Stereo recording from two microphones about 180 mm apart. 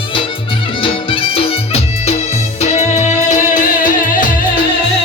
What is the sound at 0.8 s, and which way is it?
Music, 30° left (ahead or behind).